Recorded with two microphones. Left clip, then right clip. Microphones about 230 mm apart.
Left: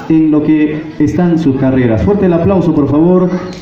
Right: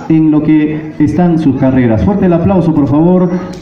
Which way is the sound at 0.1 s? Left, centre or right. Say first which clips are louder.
Right 1 dB; right.